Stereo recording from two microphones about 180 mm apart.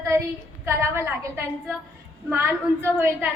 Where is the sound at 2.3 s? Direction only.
10° right (ahead or behind).